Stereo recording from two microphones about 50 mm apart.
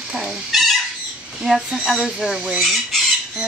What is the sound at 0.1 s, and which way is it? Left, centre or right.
Chicken, centre.